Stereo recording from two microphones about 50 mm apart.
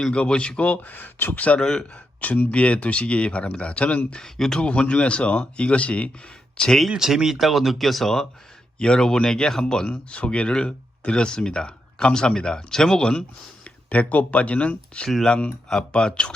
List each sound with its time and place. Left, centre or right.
0.1 s speech: left
1.6 s speech: centre
2.2 s speech: left
4.2 s speech: centre
4.6 s speech: left
6.6 s speech: centre
6.9 s speech: centre
13.9 s speech: left
15.0 s speech: centre